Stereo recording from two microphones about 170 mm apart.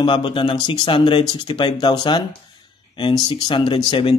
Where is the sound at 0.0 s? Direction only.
30° left (ahead or behind).